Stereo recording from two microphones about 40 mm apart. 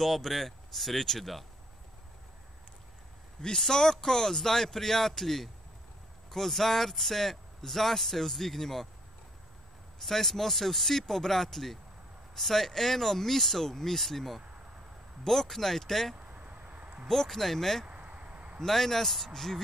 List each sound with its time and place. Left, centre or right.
0.0 s speech: centre
3.4 s speech: centre
10.0 s speech: centre
16.2 s a sound: right
17.1 s speech: centre
17.8 s a sound: right
18.6 s speech: centre